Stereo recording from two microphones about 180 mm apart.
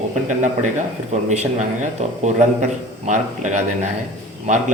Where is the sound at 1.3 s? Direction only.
40° right (ahead or behind).